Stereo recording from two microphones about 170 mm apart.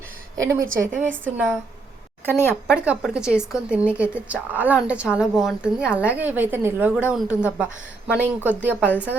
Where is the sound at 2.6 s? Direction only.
5° right (ahead or behind).